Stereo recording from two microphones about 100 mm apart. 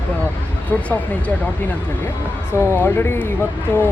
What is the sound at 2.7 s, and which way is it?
Speech, 25° left (ahead or behind).